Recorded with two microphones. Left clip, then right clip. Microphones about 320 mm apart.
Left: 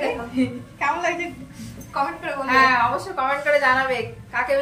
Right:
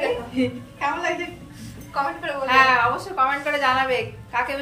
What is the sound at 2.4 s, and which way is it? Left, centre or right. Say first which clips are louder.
A woman's voice: even; centre.